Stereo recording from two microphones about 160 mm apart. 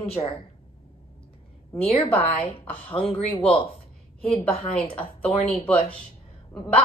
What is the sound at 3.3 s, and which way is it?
A woman's voice, 35° left (ahead or behind).